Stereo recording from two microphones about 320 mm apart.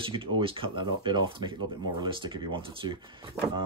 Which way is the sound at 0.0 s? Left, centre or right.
Centre.